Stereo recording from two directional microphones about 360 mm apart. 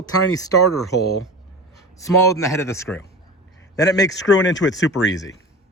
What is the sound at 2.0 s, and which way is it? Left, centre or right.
A man's voice, centre.